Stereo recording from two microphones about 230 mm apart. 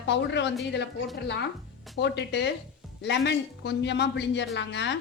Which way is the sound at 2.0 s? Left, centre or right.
Left.